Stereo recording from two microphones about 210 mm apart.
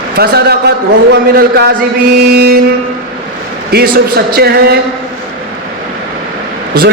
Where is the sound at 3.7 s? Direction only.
50° right (ahead or behind).